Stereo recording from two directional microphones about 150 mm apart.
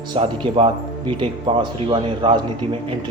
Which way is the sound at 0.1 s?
40° right (ahead or behind).